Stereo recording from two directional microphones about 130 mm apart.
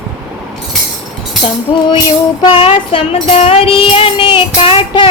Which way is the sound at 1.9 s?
40° left (ahead or behind).